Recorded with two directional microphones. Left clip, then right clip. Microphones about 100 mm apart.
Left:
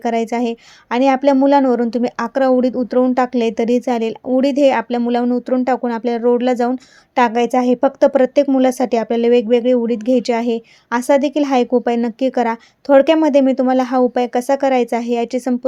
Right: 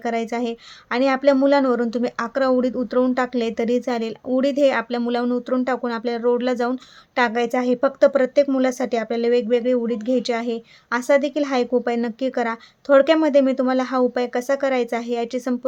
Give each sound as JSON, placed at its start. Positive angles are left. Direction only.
{"t": 0.0, "sound": "speech", "side_deg": 40}